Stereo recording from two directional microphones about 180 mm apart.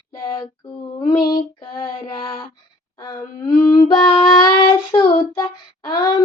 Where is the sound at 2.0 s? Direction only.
20° left (ahead or behind).